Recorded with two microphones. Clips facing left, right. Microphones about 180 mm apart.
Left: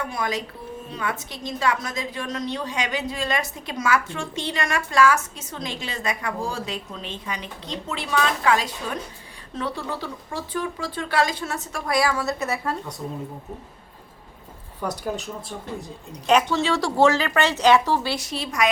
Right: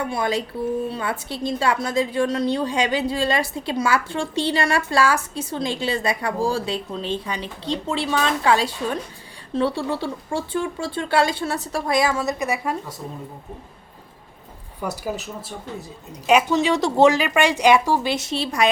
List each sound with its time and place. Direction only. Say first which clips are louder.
0.1 s a woman's voice: right 4 dB; 30° right (ahead or behind)
11.9 s speech: right 1 dB; 20° right (ahead or behind)
14.8 s speech: even; 5° right (ahead or behind); by 18.7 s 30° right (ahead or behind)